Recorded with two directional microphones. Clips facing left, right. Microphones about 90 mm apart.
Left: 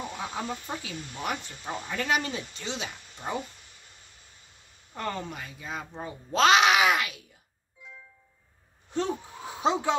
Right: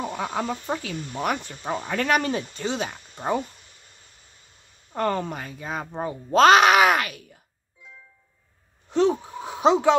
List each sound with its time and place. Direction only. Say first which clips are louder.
0.1 s speech: right 6 dB; 60° right (ahead or behind)
4.9 s speech: right 8 dB; 50° right (ahead or behind)
8.9 s speech: right 9 dB; 75° right (ahead or behind)